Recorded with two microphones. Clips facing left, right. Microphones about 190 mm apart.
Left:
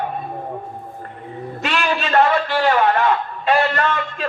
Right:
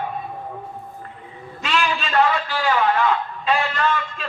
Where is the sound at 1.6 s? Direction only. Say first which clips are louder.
Left 1 dB; 55° left (ahead or behind).